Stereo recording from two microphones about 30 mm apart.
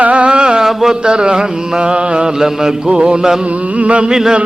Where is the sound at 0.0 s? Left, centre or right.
Right.